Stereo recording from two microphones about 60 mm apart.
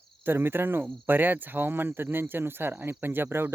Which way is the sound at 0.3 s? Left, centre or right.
Right.